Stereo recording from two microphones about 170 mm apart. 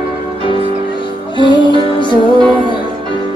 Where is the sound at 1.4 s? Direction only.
30° left (ahead or behind).